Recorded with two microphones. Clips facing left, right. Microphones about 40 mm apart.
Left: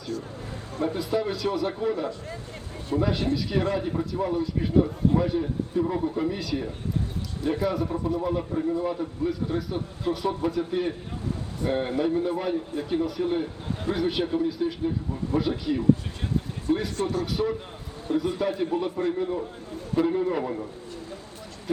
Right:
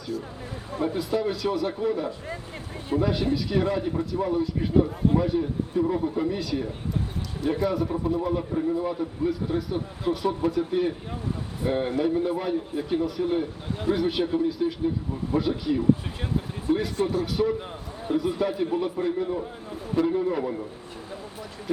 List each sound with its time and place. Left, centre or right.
0.1 s speech: centre
0.9 s a man's voice: centre
2.0 s speech: centre
3.0 s a man's voice: centre